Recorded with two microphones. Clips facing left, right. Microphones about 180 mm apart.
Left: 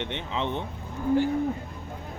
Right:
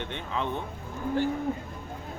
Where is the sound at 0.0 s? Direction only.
20° left (ahead or behind).